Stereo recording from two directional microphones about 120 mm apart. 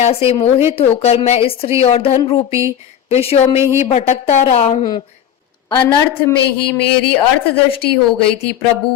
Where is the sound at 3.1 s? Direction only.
55° left (ahead or behind).